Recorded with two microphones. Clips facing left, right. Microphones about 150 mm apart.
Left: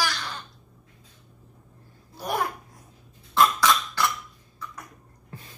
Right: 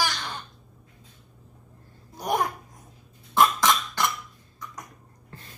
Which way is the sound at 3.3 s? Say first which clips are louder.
Even; 15° right (ahead or behind).